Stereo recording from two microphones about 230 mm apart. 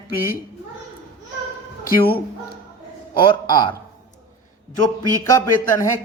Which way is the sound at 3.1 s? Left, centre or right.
Centre.